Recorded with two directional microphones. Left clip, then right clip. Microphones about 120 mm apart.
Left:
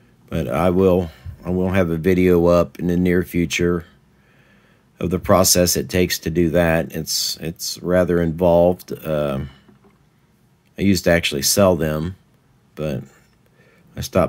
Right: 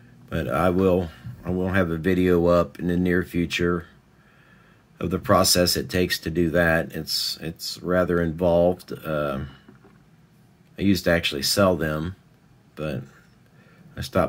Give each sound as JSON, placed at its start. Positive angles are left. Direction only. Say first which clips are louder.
{"t": 0.3, "sound": "speech", "louder": "left 3 dB", "side_deg": 20}
{"t": 4.9, "sound": "speech", "louder": "left 4 dB", "side_deg": 25}
{"t": 10.8, "sound": "speech", "louder": "left 4 dB", "side_deg": 30}